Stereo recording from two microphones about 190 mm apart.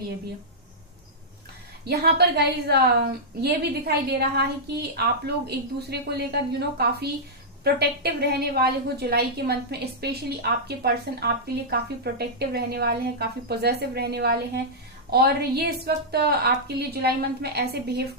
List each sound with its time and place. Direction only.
1.8 s a woman's voice: 55° right (ahead or behind)